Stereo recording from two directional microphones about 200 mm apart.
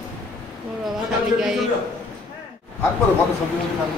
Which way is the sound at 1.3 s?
Centre (ahead or behind).